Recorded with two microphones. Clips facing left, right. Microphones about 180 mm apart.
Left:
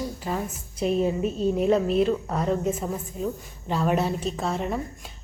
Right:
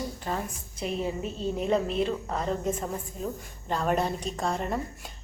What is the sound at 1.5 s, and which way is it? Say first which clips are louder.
Speech: left 4 dB; centre (ahead or behind).